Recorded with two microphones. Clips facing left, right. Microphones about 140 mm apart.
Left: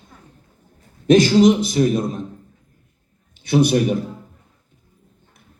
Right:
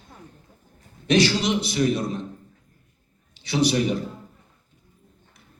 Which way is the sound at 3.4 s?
50° left (ahead or behind).